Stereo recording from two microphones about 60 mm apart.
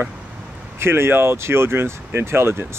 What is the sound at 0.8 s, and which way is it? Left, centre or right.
Speech, right.